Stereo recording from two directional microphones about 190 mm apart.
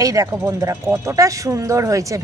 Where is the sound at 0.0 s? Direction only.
15° right (ahead or behind).